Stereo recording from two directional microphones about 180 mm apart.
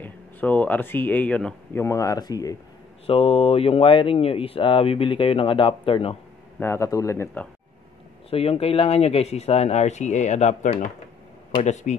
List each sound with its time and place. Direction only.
0.0 s speech: 10° left (ahead or behind)
3.1 s speech: 30° left (ahead or behind)
6.6 s speech: 15° left (ahead or behind)
8.3 s speech: 35° left (ahead or behind)